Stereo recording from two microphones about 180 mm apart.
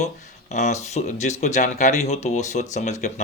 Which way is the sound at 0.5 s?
40° left (ahead or behind).